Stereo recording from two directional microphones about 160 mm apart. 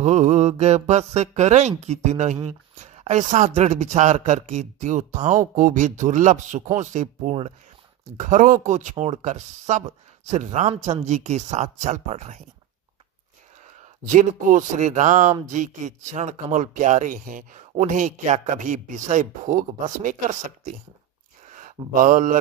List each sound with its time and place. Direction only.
0.0 s speech: 45° right (ahead or behind)
14.0 s speech: 50° right (ahead or behind)
21.9 s speech: 55° right (ahead or behind)